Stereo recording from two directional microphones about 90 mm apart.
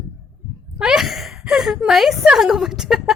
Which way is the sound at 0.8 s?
5° right (ahead or behind).